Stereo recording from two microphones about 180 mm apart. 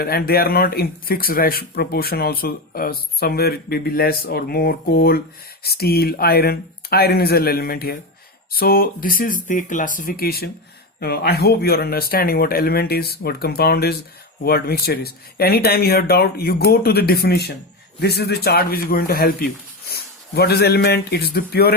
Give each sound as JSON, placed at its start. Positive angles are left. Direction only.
{"t": 0.0, "sound": "speech", "side_deg": 60}